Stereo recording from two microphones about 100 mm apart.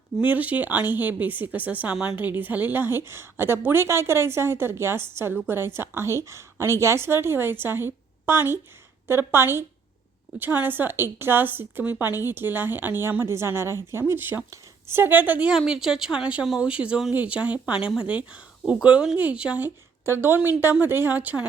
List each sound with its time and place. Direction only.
0.2 s a woman's voice: 15° right (ahead or behind)
15.5 s a woman's voice: 5° right (ahead or behind)